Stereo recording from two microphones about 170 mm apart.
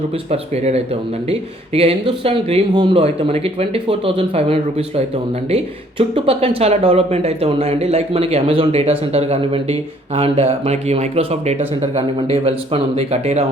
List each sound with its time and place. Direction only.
0.3 s speech: 40° right (ahead or behind)